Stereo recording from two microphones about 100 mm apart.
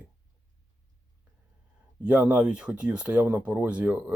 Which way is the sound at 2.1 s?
15° right (ahead or behind).